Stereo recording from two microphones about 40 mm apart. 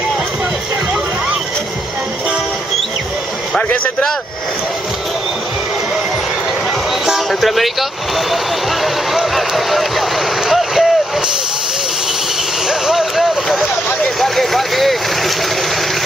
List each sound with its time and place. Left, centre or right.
7.3 s speech: centre
8.8 s music: centre
10.4 s vehicle: centre
12.6 s vehicle: centre
14.2 s speech: centre